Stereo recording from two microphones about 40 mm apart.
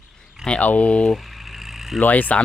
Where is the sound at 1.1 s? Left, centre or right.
Centre.